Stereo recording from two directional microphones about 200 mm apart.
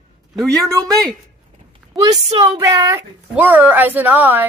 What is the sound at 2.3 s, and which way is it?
A woman's voice, 15° right (ahead or behind).